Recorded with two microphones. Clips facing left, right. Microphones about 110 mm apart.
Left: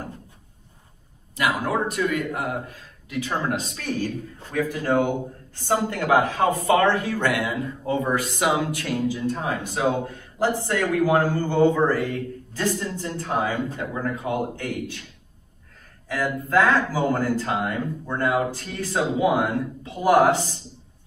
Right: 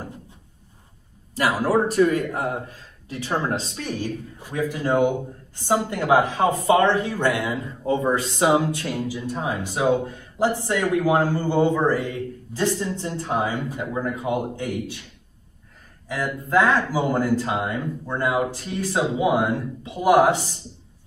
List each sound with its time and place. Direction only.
1.3 s a man's voice: 35° right (ahead or behind)
4.4 s speech: 15° right (ahead or behind)
9.1 s speech: 15° right (ahead or behind)
16.1 s speech: 20° right (ahead or behind)